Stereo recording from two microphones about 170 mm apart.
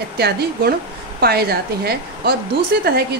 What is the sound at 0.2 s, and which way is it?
A woman's voice, 70° right (ahead or behind).